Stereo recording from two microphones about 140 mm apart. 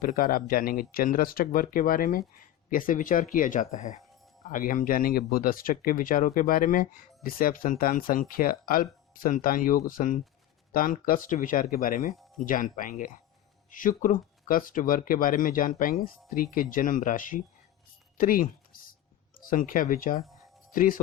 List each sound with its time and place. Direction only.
0.0 s speech: 85° left
2.6 s speech: 75° left (ahead or behind)
4.5 s speech: 70° left (ahead or behind)
10.8 s speech: 90° left
12.4 s speech: 75° left (ahead or behind)
18.2 s a sound: 80° left
19.5 s speech: 75° left (ahead or behind)